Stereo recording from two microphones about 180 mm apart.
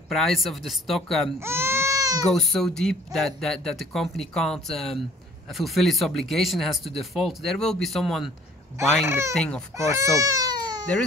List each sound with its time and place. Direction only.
0.1 s speech: centre (ahead or behind)
1.4 s baby cry: 15° right (ahead or behind)
2.3 s speech: centre (ahead or behind)
9.0 s speech: 15° right (ahead or behind)
9.3 s speech: 5° left (ahead or behind)
9.8 s speech: 15° right (ahead or behind)